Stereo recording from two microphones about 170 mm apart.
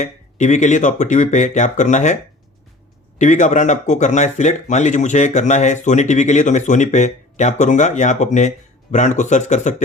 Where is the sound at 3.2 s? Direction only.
45° left (ahead or behind).